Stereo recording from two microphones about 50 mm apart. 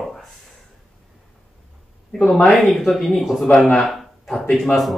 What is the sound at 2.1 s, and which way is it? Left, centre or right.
Speech, centre.